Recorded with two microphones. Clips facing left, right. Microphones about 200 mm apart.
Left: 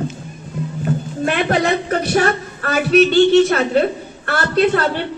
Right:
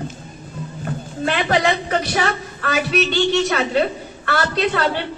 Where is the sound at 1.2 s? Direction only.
50° left (ahead or behind).